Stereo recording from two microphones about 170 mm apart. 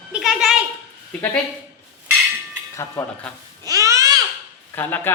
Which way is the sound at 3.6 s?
20° right (ahead or behind).